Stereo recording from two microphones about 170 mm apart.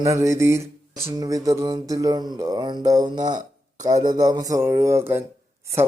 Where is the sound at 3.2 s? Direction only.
50° right (ahead or behind).